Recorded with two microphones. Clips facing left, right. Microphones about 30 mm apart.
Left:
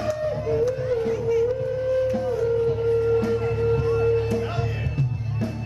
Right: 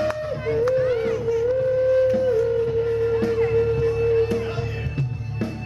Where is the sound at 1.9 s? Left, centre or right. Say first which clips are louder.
Right 2 dB; centre.